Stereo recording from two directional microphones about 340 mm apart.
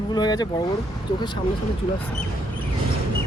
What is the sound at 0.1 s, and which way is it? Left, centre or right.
Speech, centre.